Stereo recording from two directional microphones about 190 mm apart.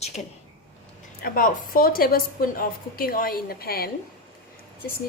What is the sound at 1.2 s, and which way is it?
A woman's voice, 50° left (ahead or behind).